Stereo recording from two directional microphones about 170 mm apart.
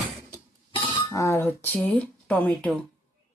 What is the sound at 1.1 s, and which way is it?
Speech, 15° left (ahead or behind).